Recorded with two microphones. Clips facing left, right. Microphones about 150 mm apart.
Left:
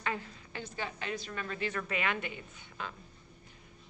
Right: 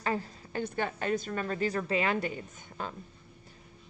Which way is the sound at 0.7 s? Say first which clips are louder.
Right 7 dB; 55° right (ahead or behind).